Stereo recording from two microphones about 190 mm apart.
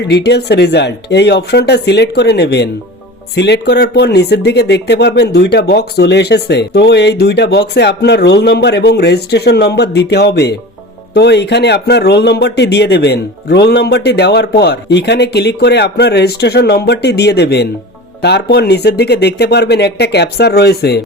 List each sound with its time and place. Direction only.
0.1 s speech: 60° left (ahead or behind)